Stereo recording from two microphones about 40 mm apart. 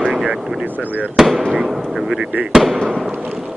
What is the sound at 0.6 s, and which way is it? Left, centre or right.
Speech, right.